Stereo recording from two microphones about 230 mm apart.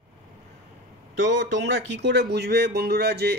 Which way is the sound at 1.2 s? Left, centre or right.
Right.